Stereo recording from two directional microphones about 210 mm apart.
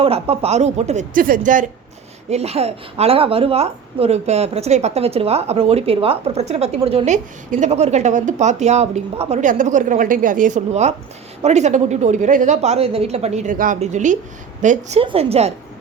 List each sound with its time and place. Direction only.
0.0 s a woman's voice: 30° right (ahead or behind)
2.3 s a woman's voice: 30° right (ahead or behind)